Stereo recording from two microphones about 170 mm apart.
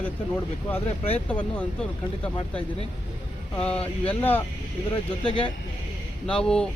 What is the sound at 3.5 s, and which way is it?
Speech, 5° left (ahead or behind).